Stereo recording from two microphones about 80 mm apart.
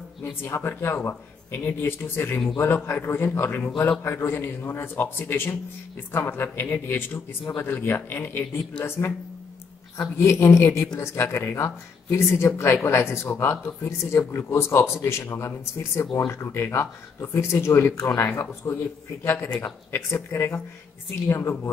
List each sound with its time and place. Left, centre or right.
0.4 s a man's voice: left
9.9 s speech: left
19.3 s a man's voice: left